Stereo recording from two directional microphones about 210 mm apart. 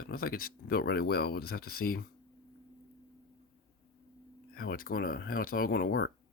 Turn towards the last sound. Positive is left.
turn(degrees=50)  # may be behind; listen again after turning